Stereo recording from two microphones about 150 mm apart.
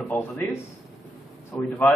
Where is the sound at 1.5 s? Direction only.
5° left (ahead or behind).